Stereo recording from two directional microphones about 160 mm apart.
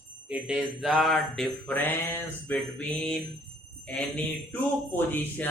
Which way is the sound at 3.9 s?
10° left (ahead or behind).